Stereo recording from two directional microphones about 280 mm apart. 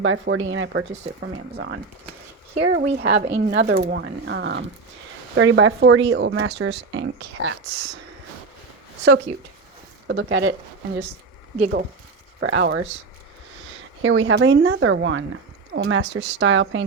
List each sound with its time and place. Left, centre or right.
0.0 s speech: right
0.9 s speech: right
2.7 s speech: right
10.1 s speech: right
11.5 s speech: right
12.4 s speech: right
14.0 s speech: right